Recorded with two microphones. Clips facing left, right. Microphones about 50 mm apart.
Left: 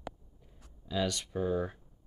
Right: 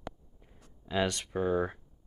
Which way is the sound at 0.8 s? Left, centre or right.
Right.